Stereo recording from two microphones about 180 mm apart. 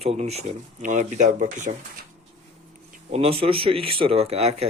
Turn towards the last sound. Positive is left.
turn(degrees=-35)  # may be behind; listen again after turning